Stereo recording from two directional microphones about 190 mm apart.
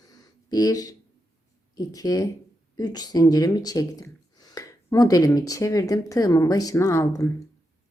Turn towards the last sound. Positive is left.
turn(degrees=15)  # may be behind; listen again after turning